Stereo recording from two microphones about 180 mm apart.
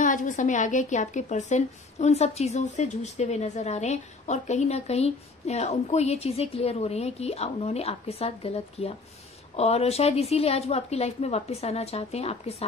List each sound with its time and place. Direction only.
0.0 s a woman's voice: 45° left (ahead or behind)